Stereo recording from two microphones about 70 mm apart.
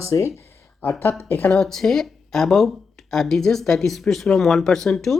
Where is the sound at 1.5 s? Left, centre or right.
Centre.